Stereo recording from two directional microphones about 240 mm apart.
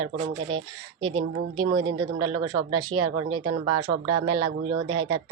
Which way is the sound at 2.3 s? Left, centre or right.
Right.